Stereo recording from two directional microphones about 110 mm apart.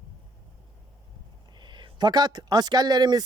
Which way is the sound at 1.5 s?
45° right (ahead or behind).